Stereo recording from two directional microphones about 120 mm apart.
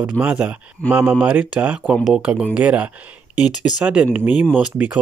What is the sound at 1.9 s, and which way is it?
Speech, centre (ahead or behind).